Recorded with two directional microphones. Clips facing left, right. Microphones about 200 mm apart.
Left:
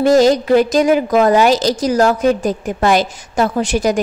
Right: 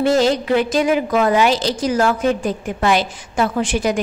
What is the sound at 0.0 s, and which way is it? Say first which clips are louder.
A woman's voice: left 5 dB; 40° left (ahead or behind).